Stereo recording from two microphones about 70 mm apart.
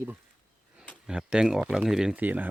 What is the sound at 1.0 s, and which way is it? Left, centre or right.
Speech, centre.